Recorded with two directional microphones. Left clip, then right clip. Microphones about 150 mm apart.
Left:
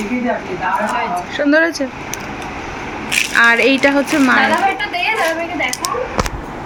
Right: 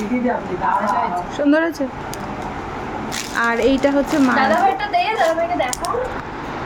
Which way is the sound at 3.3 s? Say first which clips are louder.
Left 5 dB; centre (ahead or behind).